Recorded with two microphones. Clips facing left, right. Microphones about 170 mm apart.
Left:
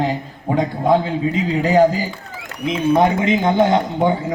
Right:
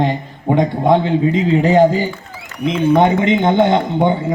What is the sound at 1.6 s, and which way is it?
Speech, 25° right (ahead or behind).